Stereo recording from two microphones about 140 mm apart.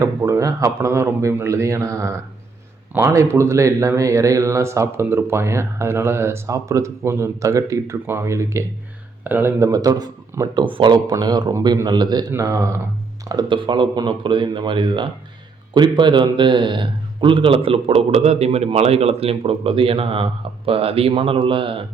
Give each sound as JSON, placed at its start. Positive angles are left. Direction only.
{"t": 0.0, "sound": "speech", "side_deg": -20}
{"t": 13.2, "sound": "a man's voice", "side_deg": -30}